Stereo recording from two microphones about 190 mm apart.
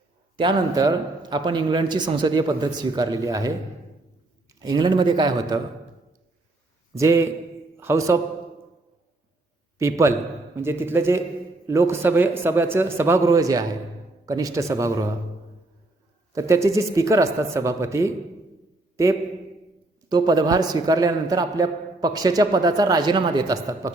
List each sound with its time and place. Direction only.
0.3 s a man's voice: 20° right (ahead or behind)
6.9 s a man's voice: 15° right (ahead or behind)
9.7 s a man's voice: 15° right (ahead or behind)
16.3 s a man's voice: 15° right (ahead or behind)
20.1 s a man's voice: 20° right (ahead or behind)